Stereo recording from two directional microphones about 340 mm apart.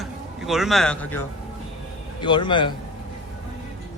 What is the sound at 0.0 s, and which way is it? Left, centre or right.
A man's voice, centre.